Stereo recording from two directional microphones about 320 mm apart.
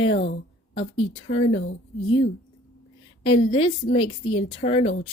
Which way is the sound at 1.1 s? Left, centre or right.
Centre.